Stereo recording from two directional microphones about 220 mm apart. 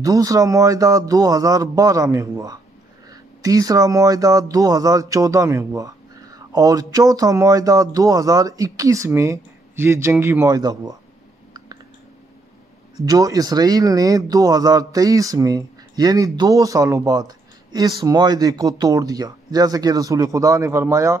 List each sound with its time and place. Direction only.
0.0 s speech: 15° right (ahead or behind)
13.0 s speech: 15° right (ahead or behind)